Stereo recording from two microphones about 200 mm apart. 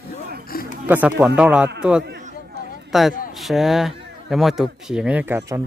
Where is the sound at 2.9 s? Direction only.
Centre (ahead or behind).